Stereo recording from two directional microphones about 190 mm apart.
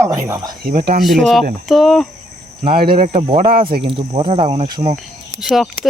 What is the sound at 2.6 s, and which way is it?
Speech, 50° right (ahead or behind).